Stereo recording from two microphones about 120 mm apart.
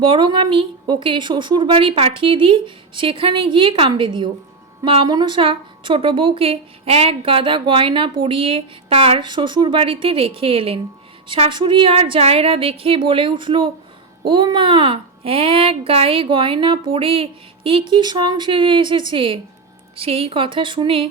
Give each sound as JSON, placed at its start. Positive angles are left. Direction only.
{"t": 0.0, "sound": "a woman's voice", "side_deg": -45}